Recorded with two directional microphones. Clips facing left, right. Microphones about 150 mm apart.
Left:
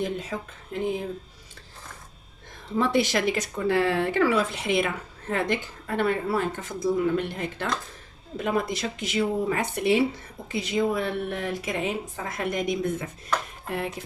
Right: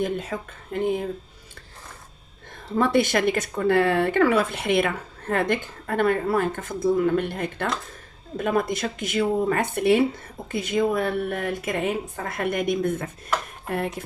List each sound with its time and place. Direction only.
0.0 s speech: 55° right (ahead or behind)
2.7 s speech: 55° right (ahead or behind)
6.0 s a woman's voice: 55° right (ahead or behind)